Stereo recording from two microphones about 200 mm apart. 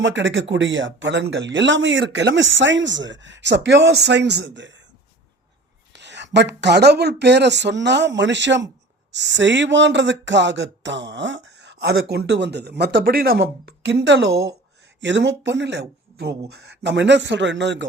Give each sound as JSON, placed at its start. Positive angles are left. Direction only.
{"t": 0.0, "sound": "speech", "side_deg": -65}
{"t": 5.9, "sound": "speech", "side_deg": -60}